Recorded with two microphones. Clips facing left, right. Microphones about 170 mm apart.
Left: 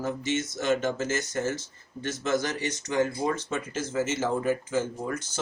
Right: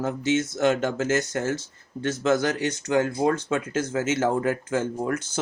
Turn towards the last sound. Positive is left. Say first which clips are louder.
# right 3 dB
turn(degrees=-65)  # may be behind; listen again after turning